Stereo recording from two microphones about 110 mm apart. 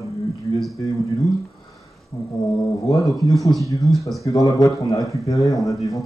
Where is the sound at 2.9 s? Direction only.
30° left (ahead or behind).